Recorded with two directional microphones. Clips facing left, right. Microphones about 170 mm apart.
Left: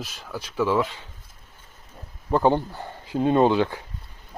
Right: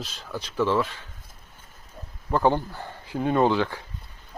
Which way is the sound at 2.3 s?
15° left (ahead or behind).